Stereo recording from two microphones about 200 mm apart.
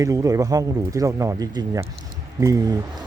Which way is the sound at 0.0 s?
15° right (ahead or behind).